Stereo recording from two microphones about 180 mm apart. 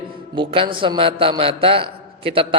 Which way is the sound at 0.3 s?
30° right (ahead or behind).